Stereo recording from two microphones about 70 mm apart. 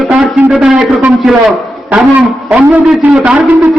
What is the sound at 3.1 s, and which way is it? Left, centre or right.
Speech, centre.